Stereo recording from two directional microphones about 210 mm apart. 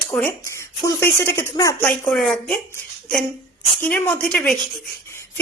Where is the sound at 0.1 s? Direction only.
5° left (ahead or behind).